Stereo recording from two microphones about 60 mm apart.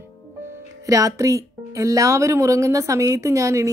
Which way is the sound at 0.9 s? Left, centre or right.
Right.